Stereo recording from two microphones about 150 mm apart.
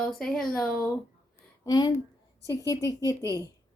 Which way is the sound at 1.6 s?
25° left (ahead or behind).